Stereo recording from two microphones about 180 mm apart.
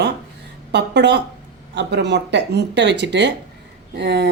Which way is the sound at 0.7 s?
70° right (ahead or behind).